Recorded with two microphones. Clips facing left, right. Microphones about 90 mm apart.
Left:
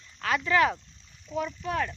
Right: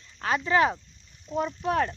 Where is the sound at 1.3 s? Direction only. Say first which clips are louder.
Right 4 dB; 40° right (ahead or behind).